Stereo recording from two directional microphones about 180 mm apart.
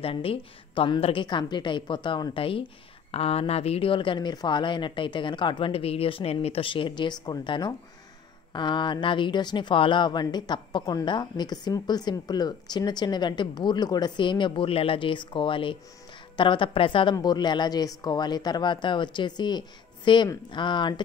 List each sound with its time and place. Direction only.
0.0 s speech: 30° left (ahead or behind)